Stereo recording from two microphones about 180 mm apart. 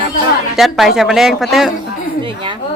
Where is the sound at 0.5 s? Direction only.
Centre (ahead or behind).